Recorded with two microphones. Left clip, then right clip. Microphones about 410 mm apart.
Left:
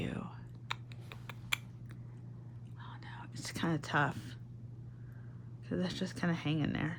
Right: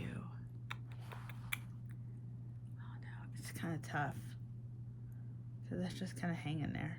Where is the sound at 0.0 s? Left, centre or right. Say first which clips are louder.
Left 8 dB; centre.